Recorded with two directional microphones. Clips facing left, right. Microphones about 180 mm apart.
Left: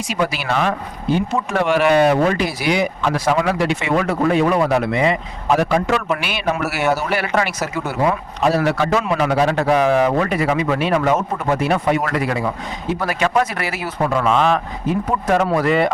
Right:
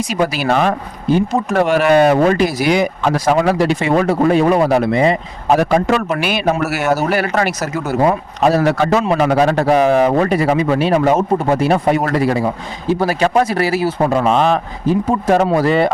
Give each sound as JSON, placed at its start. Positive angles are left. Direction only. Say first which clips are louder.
{"t": 0.1, "sound": "speech", "louder": "right 3 dB", "side_deg": -40}